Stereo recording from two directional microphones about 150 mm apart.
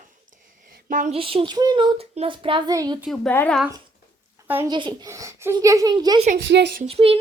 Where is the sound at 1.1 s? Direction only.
40° right (ahead or behind).